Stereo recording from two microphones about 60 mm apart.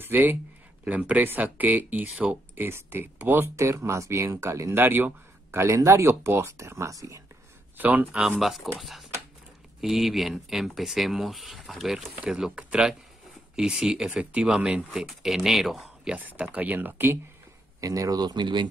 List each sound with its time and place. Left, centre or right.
0.0 s speech: right
2.5 s speech: right
3.5 s speech: right
4.8 s speech: right
5.5 s speech: right
6.9 s speech: right
7.7 s speech: right
8.4 s speech: centre
16.2 s speech: right
17.7 s speech: right